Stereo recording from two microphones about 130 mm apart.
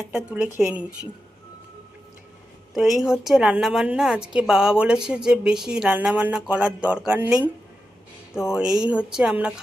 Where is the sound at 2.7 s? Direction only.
Centre (ahead or behind).